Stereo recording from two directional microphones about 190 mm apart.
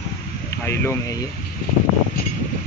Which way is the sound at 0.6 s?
15° left (ahead or behind).